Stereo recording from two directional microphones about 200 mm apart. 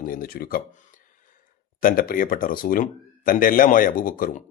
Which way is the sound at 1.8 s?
45° left (ahead or behind).